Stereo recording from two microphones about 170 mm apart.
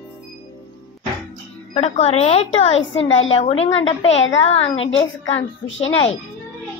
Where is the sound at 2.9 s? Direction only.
90° left.